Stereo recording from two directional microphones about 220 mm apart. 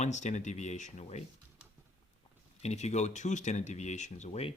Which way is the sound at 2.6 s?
30° left (ahead or behind).